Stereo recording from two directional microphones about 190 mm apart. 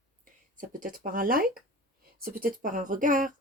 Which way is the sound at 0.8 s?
45° right (ahead or behind).